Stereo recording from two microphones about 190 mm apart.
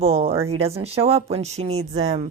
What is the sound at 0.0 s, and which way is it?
Speech, 30° right (ahead or behind).